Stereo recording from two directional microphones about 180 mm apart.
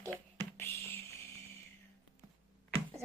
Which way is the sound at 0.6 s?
15° left (ahead or behind).